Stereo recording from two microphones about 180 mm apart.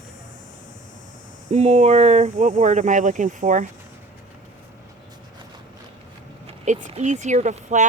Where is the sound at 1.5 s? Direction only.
35° right (ahead or behind).